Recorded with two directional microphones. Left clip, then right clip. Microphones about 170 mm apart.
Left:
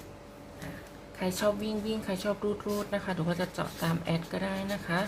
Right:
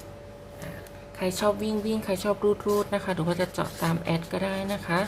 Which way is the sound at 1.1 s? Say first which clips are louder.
Right 4 dB; 15° right (ahead or behind).